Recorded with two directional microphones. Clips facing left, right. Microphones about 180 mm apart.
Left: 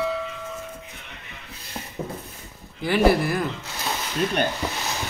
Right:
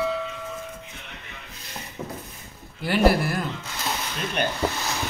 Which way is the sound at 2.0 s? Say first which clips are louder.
Left 3 dB; 30° left (ahead or behind).